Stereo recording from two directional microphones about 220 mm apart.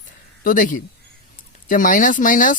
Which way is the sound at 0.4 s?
35° left (ahead or behind).